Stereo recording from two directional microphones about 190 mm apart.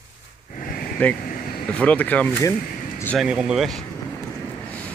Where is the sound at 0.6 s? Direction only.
50° left (ahead or behind).